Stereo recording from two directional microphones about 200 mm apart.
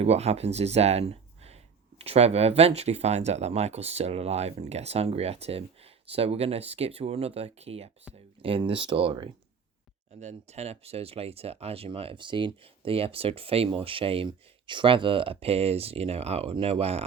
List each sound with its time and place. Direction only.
0.0 s speech: 30° right (ahead or behind)